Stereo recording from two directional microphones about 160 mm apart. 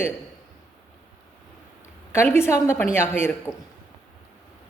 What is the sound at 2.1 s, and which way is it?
A woman's voice, 15° left (ahead or behind).